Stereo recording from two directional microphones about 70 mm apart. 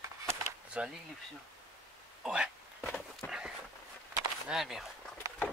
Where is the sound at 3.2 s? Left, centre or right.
Left.